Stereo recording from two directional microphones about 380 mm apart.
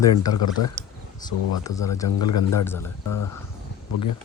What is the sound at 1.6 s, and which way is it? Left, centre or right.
Speech, centre.